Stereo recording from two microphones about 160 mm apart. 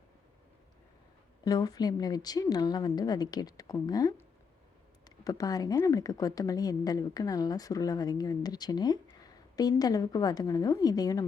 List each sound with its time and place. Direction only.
1.5 s speech: 25° left (ahead or behind)